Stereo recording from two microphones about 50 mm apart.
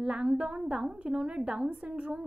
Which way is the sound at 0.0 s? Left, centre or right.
Centre.